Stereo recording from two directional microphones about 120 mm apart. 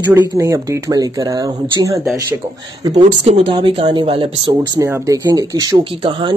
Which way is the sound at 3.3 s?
50° right (ahead or behind).